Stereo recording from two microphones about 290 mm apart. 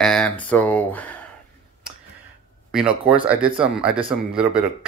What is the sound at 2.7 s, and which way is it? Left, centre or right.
Speech, centre.